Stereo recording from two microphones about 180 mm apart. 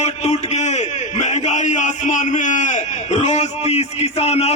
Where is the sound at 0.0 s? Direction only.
40° left (ahead or behind).